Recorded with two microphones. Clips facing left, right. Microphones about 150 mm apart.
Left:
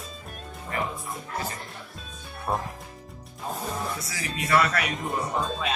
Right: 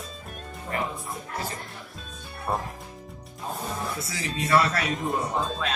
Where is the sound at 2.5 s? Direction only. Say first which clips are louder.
Even; centre (ahead or behind).